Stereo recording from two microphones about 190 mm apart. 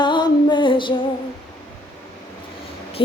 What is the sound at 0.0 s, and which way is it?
Music, 25° left (ahead or behind).